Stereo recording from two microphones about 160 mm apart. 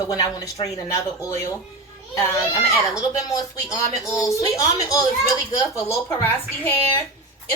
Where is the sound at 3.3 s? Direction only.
20° left (ahead or behind).